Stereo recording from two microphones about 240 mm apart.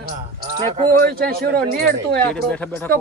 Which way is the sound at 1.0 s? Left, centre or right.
Right.